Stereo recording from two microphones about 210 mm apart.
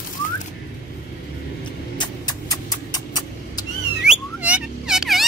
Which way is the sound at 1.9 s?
20° left (ahead or behind).